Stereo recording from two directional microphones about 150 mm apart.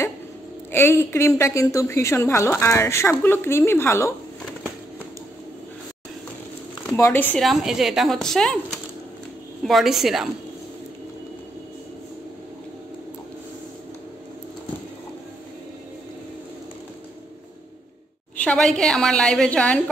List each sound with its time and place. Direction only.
0.7 s a woman's voice: 15° left (ahead or behind)
7.0 s a woman's voice: 15° left (ahead or behind)
7.3 s a woman's voice: centre (ahead or behind)
18.3 s a woman's voice: 10° left (ahead or behind)